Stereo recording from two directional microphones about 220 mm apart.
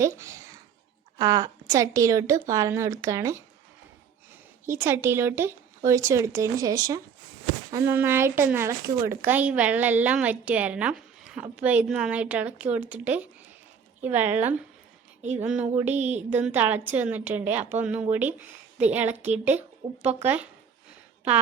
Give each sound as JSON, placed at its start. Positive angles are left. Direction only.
{"t": 0.0, "sound": "a woman's voice", "side_deg": -15}
{"t": 4.6, "sound": "a woman's voice", "side_deg": -10}
{"t": 15.4, "sound": "a sound", "side_deg": -5}
{"t": 16.0, "sound": "a woman's voice", "side_deg": -30}
{"t": 16.3, "sound": "a woman's voice", "side_deg": -10}